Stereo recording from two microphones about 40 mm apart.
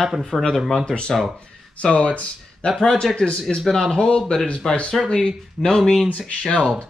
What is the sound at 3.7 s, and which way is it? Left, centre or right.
Speech, centre.